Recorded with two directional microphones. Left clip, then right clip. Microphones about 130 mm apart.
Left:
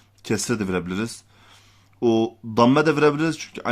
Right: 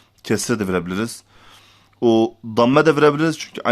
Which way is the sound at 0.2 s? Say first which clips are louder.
Right 4 dB; 25° right (ahead or behind).